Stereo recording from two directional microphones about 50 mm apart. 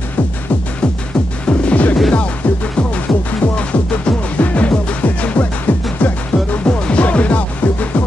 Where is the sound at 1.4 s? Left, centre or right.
Left.